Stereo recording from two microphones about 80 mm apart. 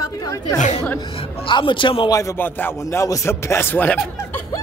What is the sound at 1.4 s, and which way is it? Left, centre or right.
Speech, left.